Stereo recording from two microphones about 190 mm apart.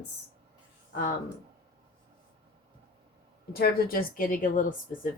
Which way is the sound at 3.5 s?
50° left (ahead or behind).